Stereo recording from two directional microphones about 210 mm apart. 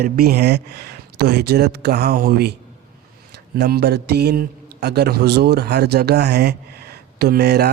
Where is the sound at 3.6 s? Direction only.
50° right (ahead or behind).